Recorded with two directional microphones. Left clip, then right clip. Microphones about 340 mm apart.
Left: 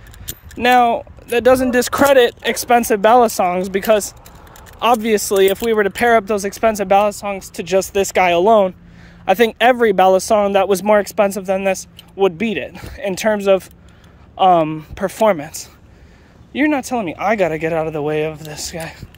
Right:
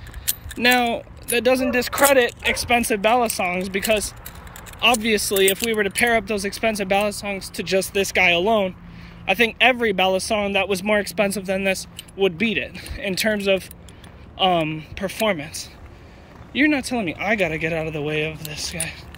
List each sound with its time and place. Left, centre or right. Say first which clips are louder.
0.2 s speech: left 2 dB; centre
16.5 s speech: left 3 dB; centre